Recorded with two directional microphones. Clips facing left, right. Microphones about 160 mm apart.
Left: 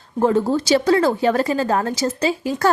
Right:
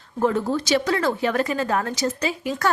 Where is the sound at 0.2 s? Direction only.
30° left (ahead or behind).